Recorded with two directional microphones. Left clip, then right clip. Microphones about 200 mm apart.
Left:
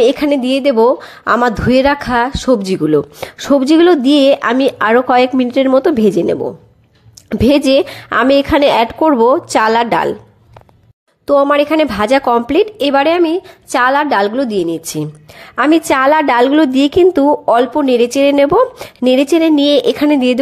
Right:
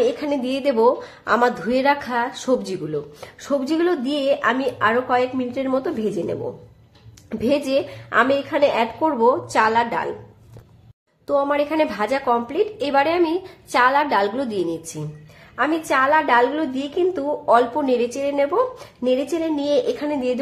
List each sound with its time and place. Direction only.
0.0 s a woman's voice: 40° left (ahead or behind)
11.2 s speech: 40° left (ahead or behind)
15.5 s a woman's voice: 45° left (ahead or behind)